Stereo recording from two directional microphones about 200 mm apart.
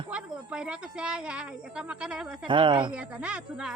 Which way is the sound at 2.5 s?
25° right (ahead or behind).